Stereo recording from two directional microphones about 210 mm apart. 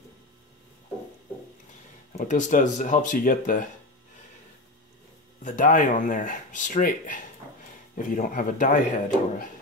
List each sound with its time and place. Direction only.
2.1 s speech: 35° left (ahead or behind)
5.4 s speech: 40° left (ahead or behind)